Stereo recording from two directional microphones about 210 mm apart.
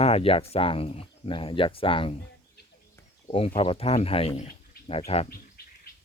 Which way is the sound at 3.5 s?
25° left (ahead or behind).